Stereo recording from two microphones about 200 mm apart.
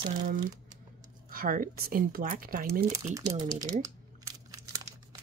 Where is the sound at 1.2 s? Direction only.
45° right (ahead or behind).